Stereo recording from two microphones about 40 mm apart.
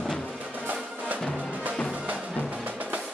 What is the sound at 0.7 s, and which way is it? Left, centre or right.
Music, right.